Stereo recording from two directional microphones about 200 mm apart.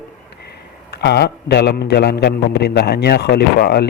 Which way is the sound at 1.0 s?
55° left (ahead or behind).